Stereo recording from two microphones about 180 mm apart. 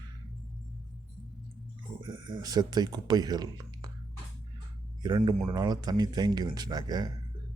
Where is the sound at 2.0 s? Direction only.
25° right (ahead or behind).